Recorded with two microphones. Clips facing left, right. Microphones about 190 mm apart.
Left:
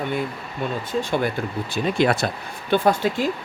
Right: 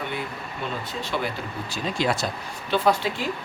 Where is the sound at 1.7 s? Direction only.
60° left (ahead or behind).